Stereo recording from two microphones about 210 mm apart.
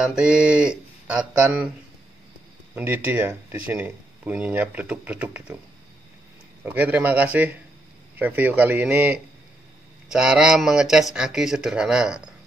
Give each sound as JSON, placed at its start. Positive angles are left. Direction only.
{"t": 0.0, "sound": "speech", "side_deg": -5}
{"t": 2.7, "sound": "speech", "side_deg": -10}
{"t": 6.6, "sound": "speech", "side_deg": -5}